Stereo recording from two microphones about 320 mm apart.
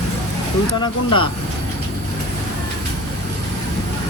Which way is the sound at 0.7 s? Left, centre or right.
Centre.